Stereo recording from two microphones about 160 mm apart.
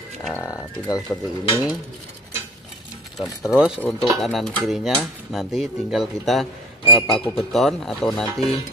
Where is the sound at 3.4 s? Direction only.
5° right (ahead or behind).